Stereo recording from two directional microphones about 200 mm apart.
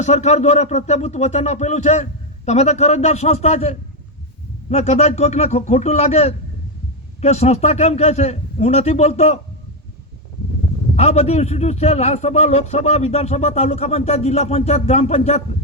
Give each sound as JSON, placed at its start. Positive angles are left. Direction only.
{"t": 0.0, "sound": "a man's voice", "side_deg": 35}
{"t": 10.9, "sound": "a man's voice", "side_deg": 30}